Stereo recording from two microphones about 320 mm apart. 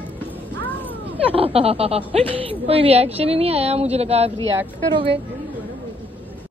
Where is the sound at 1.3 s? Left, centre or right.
Centre.